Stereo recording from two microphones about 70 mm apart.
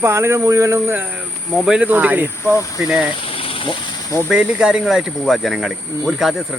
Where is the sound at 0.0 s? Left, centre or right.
Right.